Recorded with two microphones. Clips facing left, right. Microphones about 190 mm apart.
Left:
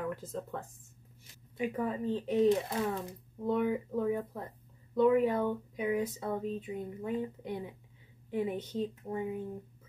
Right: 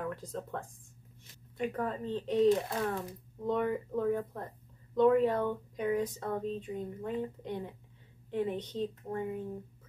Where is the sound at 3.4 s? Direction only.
5° left (ahead or behind).